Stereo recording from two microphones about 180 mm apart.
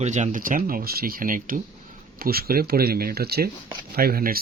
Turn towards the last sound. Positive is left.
turn(degrees=-55)  # may be behind; listen again after turning